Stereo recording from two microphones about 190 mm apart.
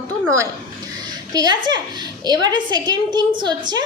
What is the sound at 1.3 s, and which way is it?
A woman's voice, 20° right (ahead or behind).